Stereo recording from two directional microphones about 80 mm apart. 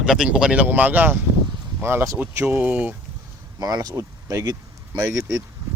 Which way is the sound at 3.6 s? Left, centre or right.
Right.